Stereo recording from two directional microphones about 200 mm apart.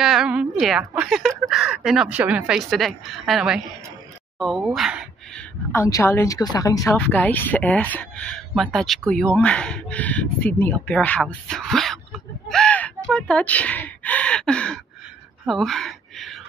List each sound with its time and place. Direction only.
0.0 s a sound: 5° right (ahead or behind)
1.5 s a woman's voice: 5° right (ahead or behind)
5.7 s a woman's voice: 15° left (ahead or behind)
6.9 s a woman's voice: 10° left (ahead or behind)